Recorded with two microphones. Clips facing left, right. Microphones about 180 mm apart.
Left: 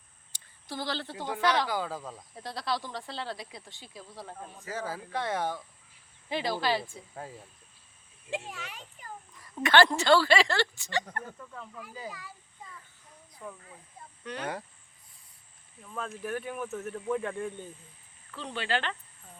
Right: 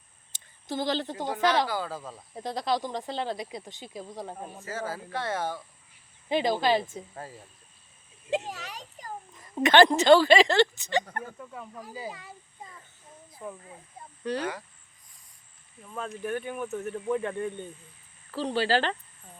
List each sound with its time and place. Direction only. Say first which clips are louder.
0.3 s a sound: right 6 dB; 20° right (ahead or behind)
1.6 s speech: right 1 dB; 15° left (ahead or behind)
2.0 s speech: even; centre (ahead or behind)
2.3 s speech: right 5 dB; 20° right (ahead or behind)
4.6 s speech: right 1 dB; 15° left (ahead or behind)
6.2 s speech: right 5 dB; 20° right (ahead or behind)
8.4 s a child's voice: right 4 dB; 35° right (ahead or behind)
9.3 s speech: right 3 dB; 20° right (ahead or behind)
11.7 s speech: right 3 dB; 35° right (ahead or behind)
12.1 s a sound: right 1 dB; 25° right (ahead or behind)
13.3 s speech: right 4 dB; 20° right (ahead or behind)
14.2 s speech: right 9 dB; 35° right (ahead or behind)
15.8 s speech: right 2 dB; 5° right (ahead or behind)
18.3 s speech: right 7 dB; 35° right (ahead or behind)